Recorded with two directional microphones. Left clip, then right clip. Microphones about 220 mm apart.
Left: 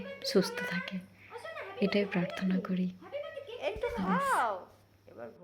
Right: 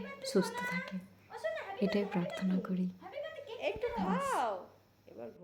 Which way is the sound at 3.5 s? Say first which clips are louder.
Left 1 dB; 15° right (ahead or behind).